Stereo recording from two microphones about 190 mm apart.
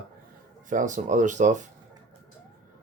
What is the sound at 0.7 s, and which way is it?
Speech, 40° right (ahead or behind).